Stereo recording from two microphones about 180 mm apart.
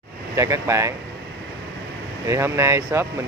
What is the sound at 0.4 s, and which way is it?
Speech, 15° right (ahead or behind).